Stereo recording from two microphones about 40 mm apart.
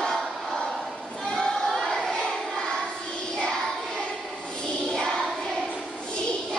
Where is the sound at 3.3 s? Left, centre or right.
Centre.